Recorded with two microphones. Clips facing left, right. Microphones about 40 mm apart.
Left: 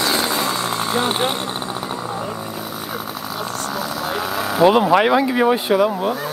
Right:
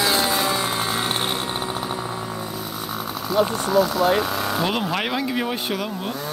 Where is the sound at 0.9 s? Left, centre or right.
Centre.